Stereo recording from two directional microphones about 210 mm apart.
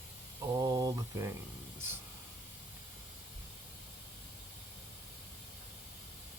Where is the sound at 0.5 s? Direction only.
15° right (ahead or behind).